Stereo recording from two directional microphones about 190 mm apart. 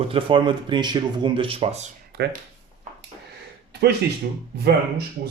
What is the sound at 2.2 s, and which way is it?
Speech, 60° right (ahead or behind).